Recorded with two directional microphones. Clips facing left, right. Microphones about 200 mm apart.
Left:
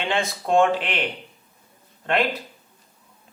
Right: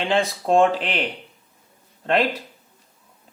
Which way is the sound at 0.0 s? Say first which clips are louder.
Right 4 dB; 35° right (ahead or behind).